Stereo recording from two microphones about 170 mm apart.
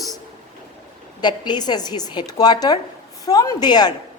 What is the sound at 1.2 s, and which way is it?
A woman's voice, 25° left (ahead or behind).